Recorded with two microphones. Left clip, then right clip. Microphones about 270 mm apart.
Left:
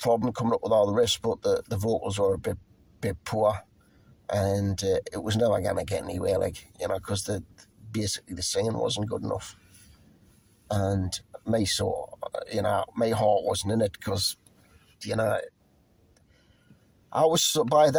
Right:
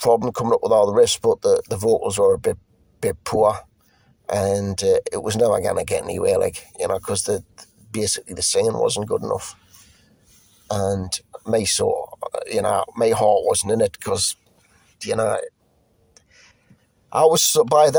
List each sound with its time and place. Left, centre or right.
0.0 s speech: right
10.7 s speech: right
17.1 s speech: right